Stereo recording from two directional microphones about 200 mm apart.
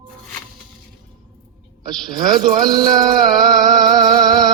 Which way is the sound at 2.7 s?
20° right (ahead or behind).